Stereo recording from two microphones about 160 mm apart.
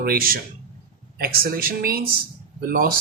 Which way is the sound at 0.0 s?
70° right (ahead or behind).